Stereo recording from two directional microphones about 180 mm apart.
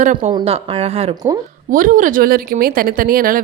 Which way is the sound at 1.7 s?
50° right (ahead or behind).